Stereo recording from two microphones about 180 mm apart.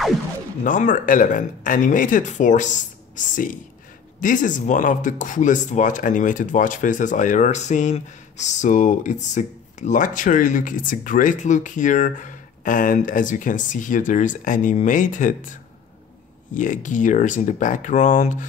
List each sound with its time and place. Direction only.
0.7 s speech: 45° left (ahead or behind)
16.5 s speech: 45° left (ahead or behind)